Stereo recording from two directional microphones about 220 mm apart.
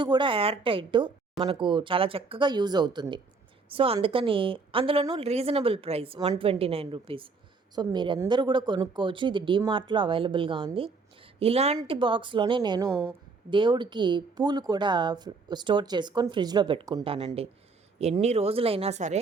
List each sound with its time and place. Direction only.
0.0 s speech: 20° right (ahead or behind)